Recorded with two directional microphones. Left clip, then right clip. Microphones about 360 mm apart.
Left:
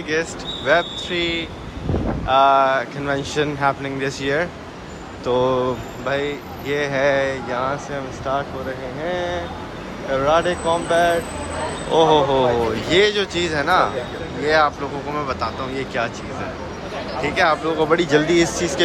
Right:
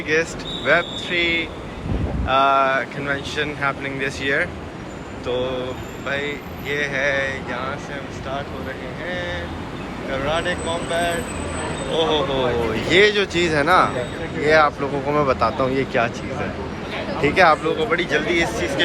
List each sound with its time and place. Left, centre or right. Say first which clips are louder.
0.1 s speech: right 2 dB; centre
9.0 s speech: left 3 dB; centre
17.2 s speech: right 3 dB; centre